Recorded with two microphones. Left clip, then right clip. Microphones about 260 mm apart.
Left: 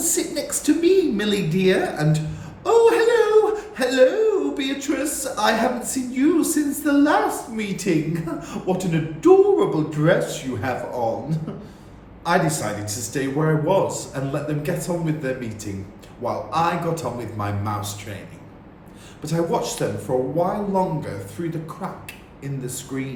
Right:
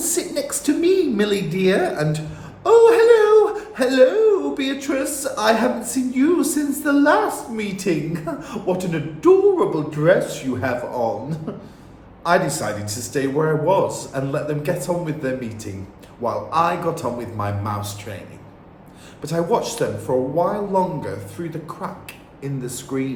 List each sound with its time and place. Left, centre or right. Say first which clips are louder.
0.0 s a woman's voice: right 1 dB; centre
2.6 s whimper: right 4 dB; centre
4.5 s speech: right 2 dB; centre
19.2 s speech: right 2 dB; centre
22.9 s speech: right 6 dB; right